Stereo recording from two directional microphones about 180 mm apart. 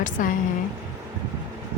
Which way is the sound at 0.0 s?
45° left (ahead or behind).